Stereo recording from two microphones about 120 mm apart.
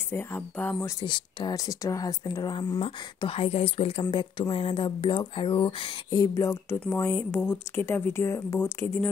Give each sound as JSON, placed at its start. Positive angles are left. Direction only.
{"t": 0.1, "sound": "speech", "side_deg": 15}
{"t": 1.0, "sound": "speech", "side_deg": 40}
{"t": 3.2, "sound": "speech", "side_deg": 50}
{"t": 6.0, "sound": "speech", "side_deg": 30}